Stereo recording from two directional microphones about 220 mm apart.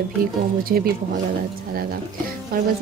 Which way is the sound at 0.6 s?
45° right (ahead or behind).